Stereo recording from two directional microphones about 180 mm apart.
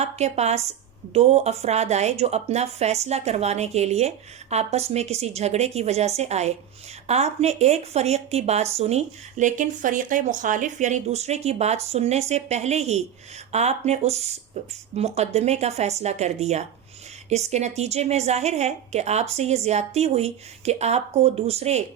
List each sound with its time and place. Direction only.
0.0 s a woman's voice: 35° right (ahead or behind)